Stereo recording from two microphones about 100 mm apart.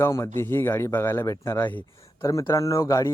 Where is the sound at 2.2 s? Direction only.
30° left (ahead or behind).